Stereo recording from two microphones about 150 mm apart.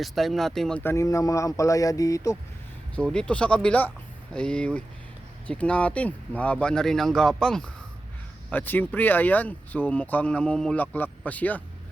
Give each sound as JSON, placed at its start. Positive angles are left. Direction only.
{"t": 0.0, "sound": "speech", "side_deg": 0}
{"t": 0.8, "sound": "speech", "side_deg": 15}
{"t": 2.9, "sound": "speech", "side_deg": 5}